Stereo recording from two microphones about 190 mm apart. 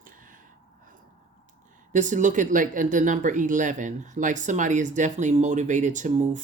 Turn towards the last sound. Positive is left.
turn(degrees=-40)  # may be behind; listen again after turning